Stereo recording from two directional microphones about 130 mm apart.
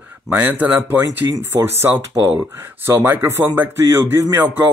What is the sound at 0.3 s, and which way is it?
Speech, 10° right (ahead or behind).